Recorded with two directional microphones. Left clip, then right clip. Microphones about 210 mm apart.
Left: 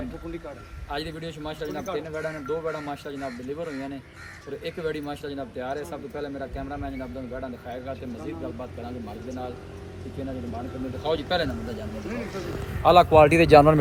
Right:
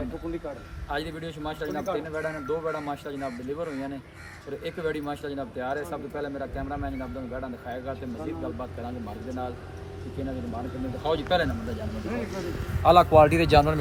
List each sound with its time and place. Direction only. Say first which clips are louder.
0.9 s speech: even; 5° right (ahead or behind)
11.0 s speech: right 1 dB; centre (ahead or behind)
12.4 s a man's voice: left 5 dB; 15° left (ahead or behind)
12.9 s a man's voice: left 1 dB; 30° left (ahead or behind)